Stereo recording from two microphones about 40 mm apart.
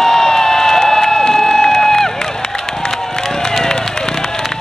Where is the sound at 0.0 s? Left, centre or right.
Centre.